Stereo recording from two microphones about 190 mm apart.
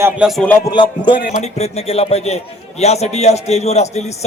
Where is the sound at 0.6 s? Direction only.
25° left (ahead or behind).